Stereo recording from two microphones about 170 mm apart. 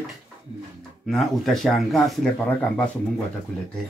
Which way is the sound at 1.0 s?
Centre (ahead or behind).